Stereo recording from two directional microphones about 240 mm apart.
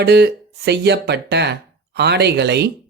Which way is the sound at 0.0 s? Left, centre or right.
Right.